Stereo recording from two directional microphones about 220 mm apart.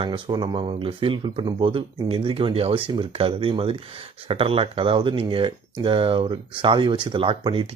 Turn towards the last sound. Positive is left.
turn(degrees=-25)  # may be behind; listen again after turning